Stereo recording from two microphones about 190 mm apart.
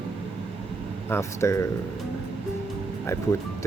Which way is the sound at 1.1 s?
15° left (ahead or behind).